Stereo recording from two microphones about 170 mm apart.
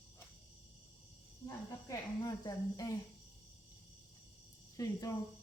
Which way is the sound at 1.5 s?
20° left (ahead or behind).